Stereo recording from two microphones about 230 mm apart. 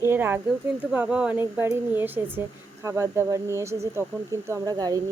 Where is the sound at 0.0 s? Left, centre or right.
Centre.